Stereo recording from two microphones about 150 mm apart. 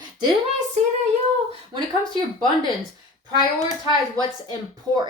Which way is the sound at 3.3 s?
25° left (ahead or behind).